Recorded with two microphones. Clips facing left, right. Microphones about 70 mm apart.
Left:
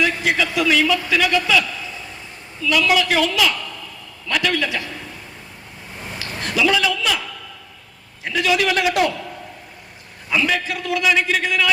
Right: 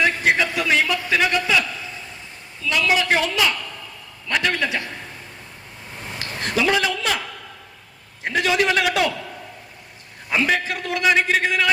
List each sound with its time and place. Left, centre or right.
0.0 s a man's voice: right
6.1 s a man's voice: right
8.2 s a man's voice: right
10.2 s a man's voice: right